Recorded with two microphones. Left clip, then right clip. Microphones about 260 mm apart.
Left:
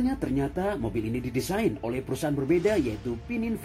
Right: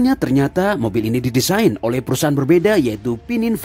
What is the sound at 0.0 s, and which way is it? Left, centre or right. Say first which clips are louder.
Speech: right 12 dB; right.